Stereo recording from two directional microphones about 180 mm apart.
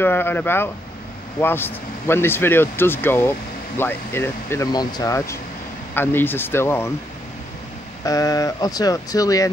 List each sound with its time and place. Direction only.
0.0 s speech: 10° left (ahead or behind)
8.0 s speech: 20° left (ahead or behind)